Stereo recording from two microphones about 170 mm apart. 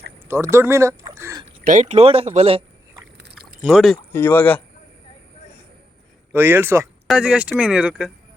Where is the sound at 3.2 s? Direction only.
75° right (ahead or behind).